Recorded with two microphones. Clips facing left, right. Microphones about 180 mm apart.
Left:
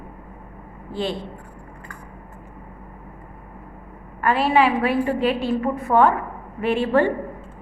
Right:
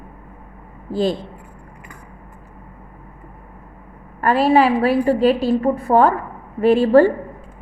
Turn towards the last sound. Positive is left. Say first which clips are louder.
# right 7 dB
turn(degrees=-35)  # may be behind; listen again after turning